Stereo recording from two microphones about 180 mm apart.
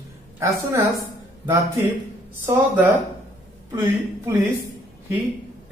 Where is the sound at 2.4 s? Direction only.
10° right (ahead or behind).